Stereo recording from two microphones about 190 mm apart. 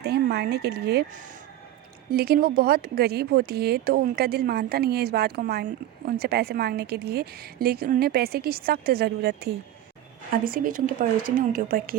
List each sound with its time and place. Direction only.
0.0 s speech: 60° right (ahead or behind)
2.1 s speech: 55° right (ahead or behind)
10.4 s speech: 50° right (ahead or behind)